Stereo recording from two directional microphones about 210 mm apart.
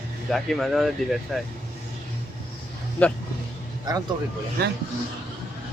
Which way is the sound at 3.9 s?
20° right (ahead or behind).